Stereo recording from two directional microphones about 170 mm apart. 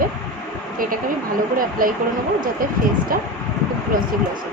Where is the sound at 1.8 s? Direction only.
55° right (ahead or behind).